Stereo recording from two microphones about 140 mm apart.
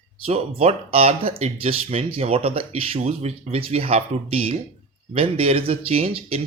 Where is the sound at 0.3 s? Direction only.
45° right (ahead or behind).